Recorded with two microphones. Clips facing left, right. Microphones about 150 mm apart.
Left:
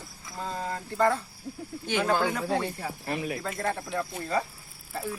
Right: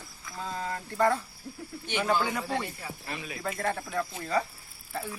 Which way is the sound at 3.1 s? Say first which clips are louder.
Left 8 dB; 45° left (ahead or behind).